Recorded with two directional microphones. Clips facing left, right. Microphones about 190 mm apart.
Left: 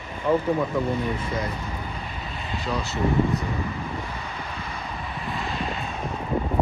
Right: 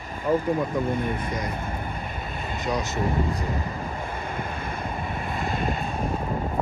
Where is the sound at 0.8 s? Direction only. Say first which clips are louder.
Even; 55° right (ahead or behind).